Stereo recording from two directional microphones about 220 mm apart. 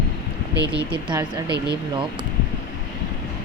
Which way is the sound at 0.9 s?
20° right (ahead or behind).